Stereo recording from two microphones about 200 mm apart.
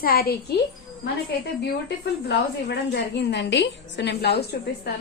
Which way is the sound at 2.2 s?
55° left (ahead or behind).